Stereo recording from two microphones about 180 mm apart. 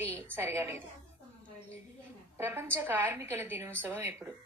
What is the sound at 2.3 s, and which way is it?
A woman's voice, 15° right (ahead or behind).